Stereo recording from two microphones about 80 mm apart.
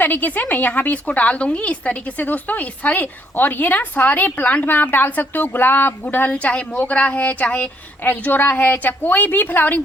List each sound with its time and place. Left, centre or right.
0.0 s a woman's voice: left